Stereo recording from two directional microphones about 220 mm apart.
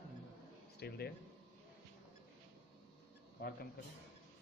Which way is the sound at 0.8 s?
45° left (ahead or behind).